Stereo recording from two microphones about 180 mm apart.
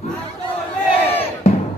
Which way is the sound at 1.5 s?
35° left (ahead or behind).